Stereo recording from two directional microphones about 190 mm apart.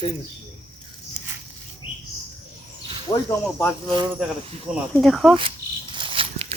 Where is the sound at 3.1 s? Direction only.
15° left (ahead or behind).